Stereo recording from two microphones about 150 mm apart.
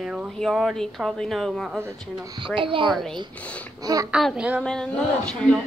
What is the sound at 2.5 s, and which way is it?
Speech, 35° right (ahead or behind).